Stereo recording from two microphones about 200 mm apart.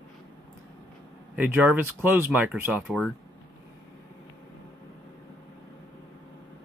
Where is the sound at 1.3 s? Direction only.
10° right (ahead or behind).